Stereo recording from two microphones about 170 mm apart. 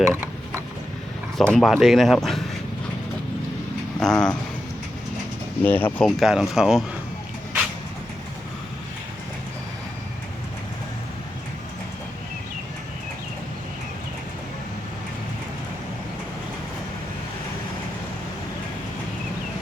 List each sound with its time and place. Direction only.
0.0 s mechanisms: 15° right (ahead or behind)
1.4 s speech: 5° left (ahead or behind)
4.0 s speech: 5° left (ahead or behind)
5.6 s speech: 10° left (ahead or behind)